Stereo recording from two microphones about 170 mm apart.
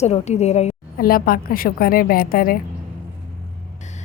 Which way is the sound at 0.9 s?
60° left (ahead or behind).